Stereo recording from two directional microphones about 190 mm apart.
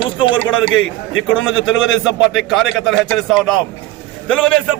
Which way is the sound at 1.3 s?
Centre (ahead or behind).